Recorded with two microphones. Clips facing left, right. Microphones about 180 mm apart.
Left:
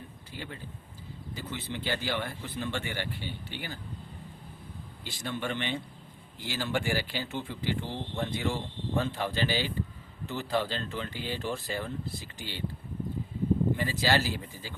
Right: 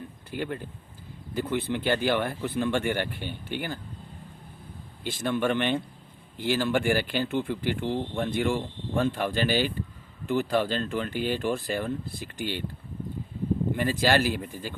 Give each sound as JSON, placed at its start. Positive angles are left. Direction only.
{"t": 0.3, "sound": "speech", "side_deg": -55}
{"t": 5.0, "sound": "speech", "side_deg": -55}
{"t": 13.7, "sound": "speech", "side_deg": -50}